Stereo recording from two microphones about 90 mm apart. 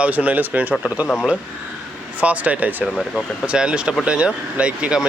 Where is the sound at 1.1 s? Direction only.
5° right (ahead or behind).